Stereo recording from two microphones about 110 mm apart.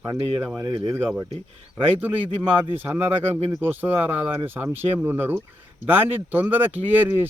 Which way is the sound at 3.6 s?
20° right (ahead or behind).